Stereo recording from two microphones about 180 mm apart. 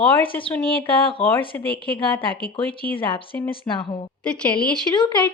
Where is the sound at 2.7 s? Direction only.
10° left (ahead or behind).